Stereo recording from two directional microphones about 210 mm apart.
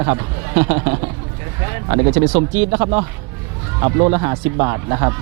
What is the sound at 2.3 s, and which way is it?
Speech, 30° right (ahead or behind).